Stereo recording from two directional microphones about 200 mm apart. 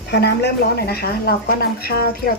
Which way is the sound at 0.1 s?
55° left (ahead or behind).